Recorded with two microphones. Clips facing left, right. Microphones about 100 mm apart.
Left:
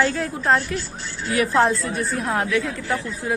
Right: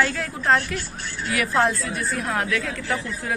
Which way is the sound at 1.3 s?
25° left (ahead or behind).